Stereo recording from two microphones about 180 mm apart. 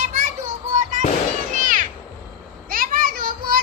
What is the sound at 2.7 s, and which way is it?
Children playing, 50° right (ahead or behind).